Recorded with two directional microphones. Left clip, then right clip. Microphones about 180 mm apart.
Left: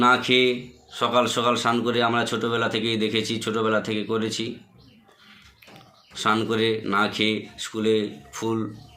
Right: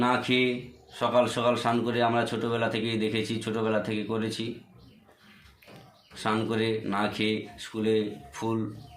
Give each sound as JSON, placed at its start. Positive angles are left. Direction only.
{"t": 0.0, "sound": "speech", "side_deg": -15}
{"t": 6.1, "sound": "speech", "side_deg": -15}